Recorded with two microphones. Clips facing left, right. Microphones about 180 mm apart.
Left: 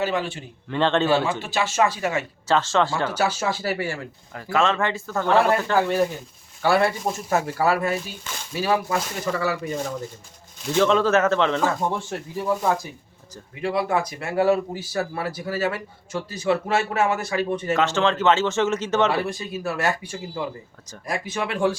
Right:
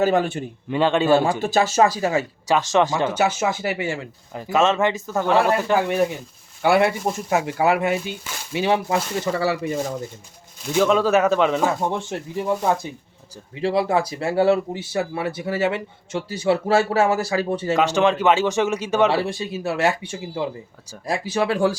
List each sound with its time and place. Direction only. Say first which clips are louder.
0.0 s speech: right 6 dB; 50° right (ahead or behind)
0.7 s speech: right 2 dB; 10° right (ahead or behind)
1.1 s speech: right 5 dB; 45° right (ahead or behind)
2.5 s speech: right 2 dB; 15° right (ahead or behind)
10.8 s speech: right 1 dB; 10° right (ahead or behind); by 17.7 s 30° right (ahead or behind)
17.7 s speech: right 4 dB; 15° right (ahead or behind)
19.1 s speech: right 3 dB; 25° right (ahead or behind)